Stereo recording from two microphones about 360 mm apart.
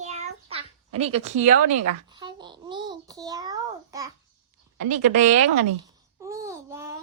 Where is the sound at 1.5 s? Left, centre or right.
Right.